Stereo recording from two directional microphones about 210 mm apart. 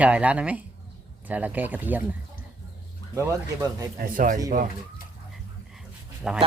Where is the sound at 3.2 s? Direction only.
15° right (ahead or behind).